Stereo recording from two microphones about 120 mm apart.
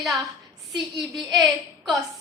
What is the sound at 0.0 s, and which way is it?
A woman's voice, centre (ahead or behind).